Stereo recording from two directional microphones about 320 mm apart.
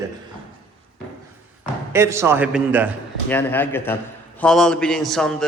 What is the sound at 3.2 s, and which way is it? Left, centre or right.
A man's voice, centre.